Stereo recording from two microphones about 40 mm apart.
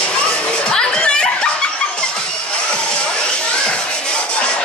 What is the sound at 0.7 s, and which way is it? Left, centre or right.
Snicker, left.